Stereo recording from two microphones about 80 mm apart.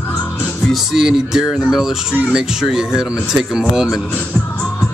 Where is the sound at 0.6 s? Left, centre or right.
Centre.